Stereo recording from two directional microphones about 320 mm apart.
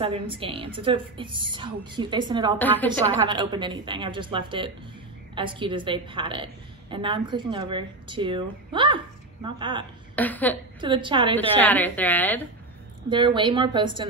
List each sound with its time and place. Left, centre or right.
0.0 s a woman's voice: centre
2.6 s a woman's voice: centre
2.9 s a woman's voice: centre
10.1 s a woman's voice: centre
10.8 s a woman's voice: centre
11.3 s a woman's voice: centre
13.1 s a woman's voice: centre